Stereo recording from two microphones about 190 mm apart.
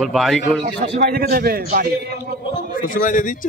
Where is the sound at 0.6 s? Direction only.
50° right (ahead or behind).